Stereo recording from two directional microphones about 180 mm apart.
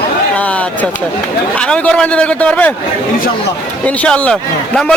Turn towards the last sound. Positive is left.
turn(degrees=5)  # may be behind; listen again after turning